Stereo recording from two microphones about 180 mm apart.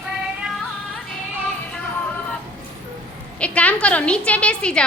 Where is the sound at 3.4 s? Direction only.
5° left (ahead or behind).